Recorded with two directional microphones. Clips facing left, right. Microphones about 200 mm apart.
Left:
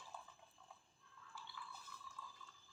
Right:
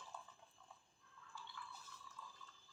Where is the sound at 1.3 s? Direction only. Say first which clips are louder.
Even; 5° left (ahead or behind).